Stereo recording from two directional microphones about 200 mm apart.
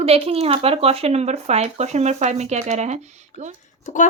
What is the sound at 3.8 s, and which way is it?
Speech, 40° left (ahead or behind).